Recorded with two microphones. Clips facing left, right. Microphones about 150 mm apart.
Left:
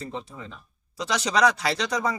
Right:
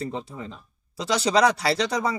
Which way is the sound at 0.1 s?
30° right (ahead or behind).